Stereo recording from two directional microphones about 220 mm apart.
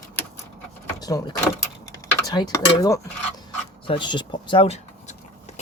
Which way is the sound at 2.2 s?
20° left (ahead or behind).